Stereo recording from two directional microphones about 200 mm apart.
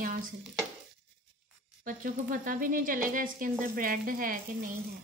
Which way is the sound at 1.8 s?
45° right (ahead or behind).